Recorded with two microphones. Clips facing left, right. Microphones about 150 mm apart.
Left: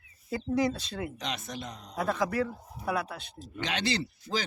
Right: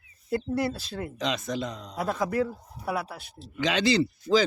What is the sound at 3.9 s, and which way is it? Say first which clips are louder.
Speech: right 9 dB; 90° right.